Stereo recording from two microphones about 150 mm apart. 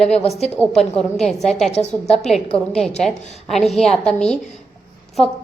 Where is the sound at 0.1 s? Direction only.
45° left (ahead or behind).